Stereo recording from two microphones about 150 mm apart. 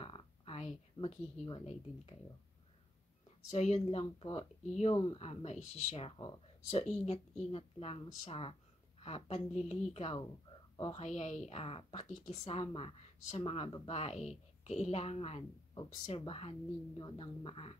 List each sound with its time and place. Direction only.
0.0 s a sound: 35° left (ahead or behind)
3.4 s speech: 50° left (ahead or behind)
4.9 s speech: 25° left (ahead or behind)
5.2 s speech: 45° left (ahead or behind)